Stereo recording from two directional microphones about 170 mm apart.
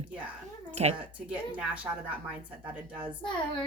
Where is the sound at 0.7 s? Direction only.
40° right (ahead or behind).